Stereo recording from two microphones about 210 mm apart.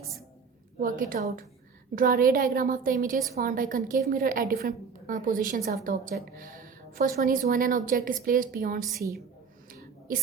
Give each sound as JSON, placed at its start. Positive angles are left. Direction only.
{"t": 0.8, "sound": "a woman's voice", "side_deg": -40}